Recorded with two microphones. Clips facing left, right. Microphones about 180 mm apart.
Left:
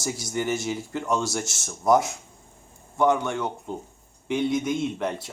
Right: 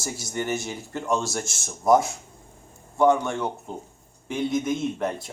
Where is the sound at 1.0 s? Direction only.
25° right (ahead or behind).